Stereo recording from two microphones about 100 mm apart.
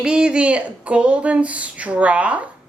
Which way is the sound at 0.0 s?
10° right (ahead or behind).